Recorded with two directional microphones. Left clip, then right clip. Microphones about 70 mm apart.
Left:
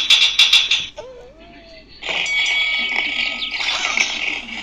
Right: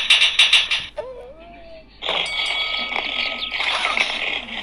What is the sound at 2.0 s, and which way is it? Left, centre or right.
Music, right.